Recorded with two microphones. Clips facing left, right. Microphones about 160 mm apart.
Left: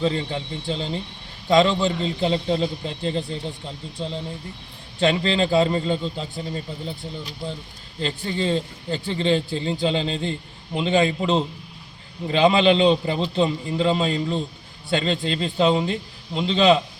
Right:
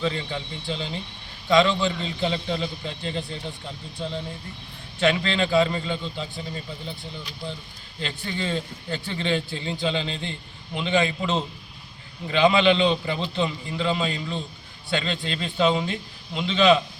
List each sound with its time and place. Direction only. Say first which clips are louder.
0.0 s speech: left 4 dB; 35° left (ahead or behind)
4.9 s speech: left 2 dB; 35° left (ahead or behind)
7.9 s speech: left 5 dB; 35° left (ahead or behind)